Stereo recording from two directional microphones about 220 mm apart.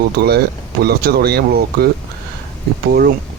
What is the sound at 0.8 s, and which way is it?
Speech, 45° right (ahead or behind).